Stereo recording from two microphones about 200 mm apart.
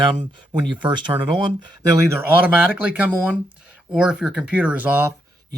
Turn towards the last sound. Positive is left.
turn(degrees=-10)  # may be behind; listen again after turning